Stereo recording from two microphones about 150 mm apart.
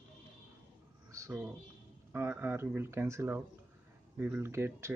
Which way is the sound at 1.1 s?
20° right (ahead or behind).